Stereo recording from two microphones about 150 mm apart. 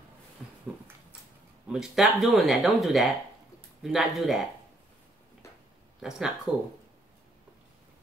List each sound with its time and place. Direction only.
0.4 s a sound: 5° right (ahead or behind)
1.7 s speech: 5° right (ahead or behind)
5.9 s speech: 5° right (ahead or behind)